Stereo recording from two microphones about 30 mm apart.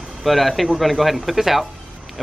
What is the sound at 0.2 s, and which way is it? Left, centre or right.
Speech, centre.